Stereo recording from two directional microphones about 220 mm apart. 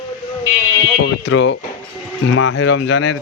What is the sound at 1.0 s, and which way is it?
A man's voice, 55° left (ahead or behind).